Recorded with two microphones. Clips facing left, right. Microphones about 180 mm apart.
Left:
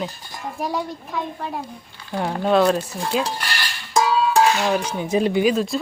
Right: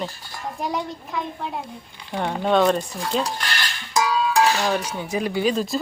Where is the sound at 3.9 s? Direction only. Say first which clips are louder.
Left 3 dB; 25° left (ahead or behind).